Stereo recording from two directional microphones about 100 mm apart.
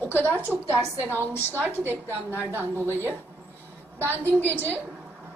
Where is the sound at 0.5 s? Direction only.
20° right (ahead or behind).